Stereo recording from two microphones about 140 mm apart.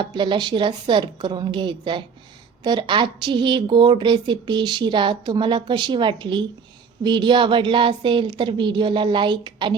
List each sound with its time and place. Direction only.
0.0 s a woman's voice: 35° right (ahead or behind)